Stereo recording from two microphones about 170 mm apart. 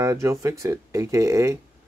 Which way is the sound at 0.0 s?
15° right (ahead or behind).